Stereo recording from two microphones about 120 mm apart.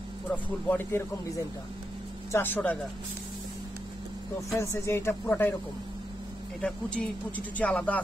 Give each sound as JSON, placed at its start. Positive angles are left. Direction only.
{"t": 0.3, "sound": "speech", "side_deg": 15}
{"t": 2.3, "sound": "speech", "side_deg": 15}
{"t": 4.5, "sound": "speech", "side_deg": 25}
{"t": 6.6, "sound": "speech", "side_deg": 10}